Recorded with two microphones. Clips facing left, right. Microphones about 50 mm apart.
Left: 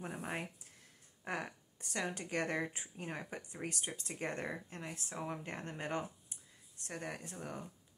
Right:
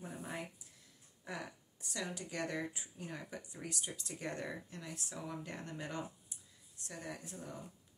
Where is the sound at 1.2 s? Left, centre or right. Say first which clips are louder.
Left 4 dB; left.